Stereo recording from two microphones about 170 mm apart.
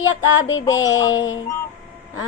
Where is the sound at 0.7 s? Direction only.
20° left (ahead or behind).